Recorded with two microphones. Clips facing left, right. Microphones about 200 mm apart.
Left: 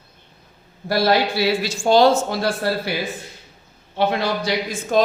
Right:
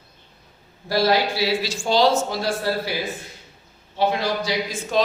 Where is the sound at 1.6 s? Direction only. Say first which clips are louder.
Left 7 dB; 50° left (ahead or behind).